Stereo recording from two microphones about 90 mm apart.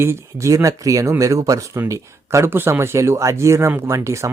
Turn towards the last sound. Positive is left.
turn(degrees=-30)  # may be behind; listen again after turning